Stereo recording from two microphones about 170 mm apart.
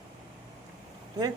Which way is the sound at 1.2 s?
25° right (ahead or behind).